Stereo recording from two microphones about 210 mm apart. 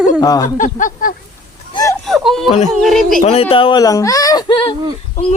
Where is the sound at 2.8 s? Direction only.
Centre (ahead or behind).